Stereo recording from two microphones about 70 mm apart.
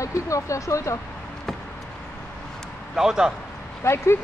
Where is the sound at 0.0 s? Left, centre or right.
Left.